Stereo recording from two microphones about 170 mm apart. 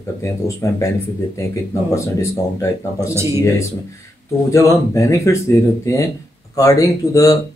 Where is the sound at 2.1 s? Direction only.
15° left (ahead or behind).